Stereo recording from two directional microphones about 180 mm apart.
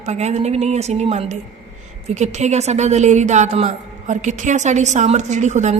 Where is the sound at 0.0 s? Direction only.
40° right (ahead or behind).